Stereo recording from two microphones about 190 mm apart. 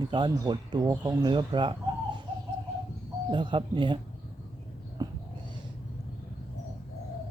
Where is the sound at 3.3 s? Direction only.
25° right (ahead or behind).